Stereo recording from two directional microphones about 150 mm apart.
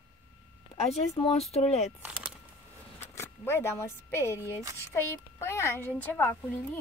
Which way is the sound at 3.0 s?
15° left (ahead or behind).